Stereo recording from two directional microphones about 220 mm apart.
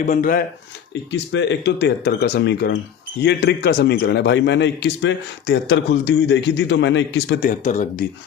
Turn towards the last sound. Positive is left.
turn(degrees=35)  # may be behind; listen again after turning